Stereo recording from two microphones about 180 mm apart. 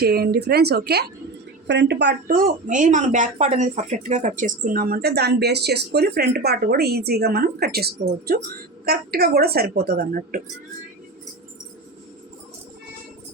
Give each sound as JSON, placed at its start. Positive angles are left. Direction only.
{"t": 0.0, "sound": "speech", "side_deg": -60}
{"t": 1.6, "sound": "speech", "side_deg": -75}